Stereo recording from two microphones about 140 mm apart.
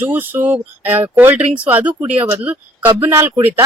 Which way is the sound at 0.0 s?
15° right (ahead or behind).